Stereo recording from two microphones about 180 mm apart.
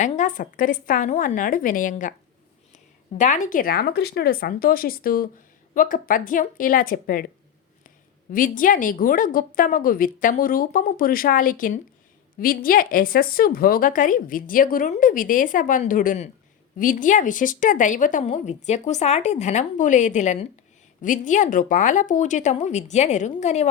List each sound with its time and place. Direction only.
0.0 s a woman's voice: 40° left (ahead or behind)